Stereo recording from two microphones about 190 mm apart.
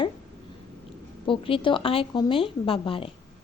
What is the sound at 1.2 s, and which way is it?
A woman's voice, 25° left (ahead or behind).